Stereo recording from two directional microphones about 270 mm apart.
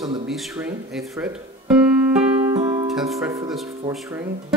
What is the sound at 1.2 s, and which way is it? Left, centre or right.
Music, centre.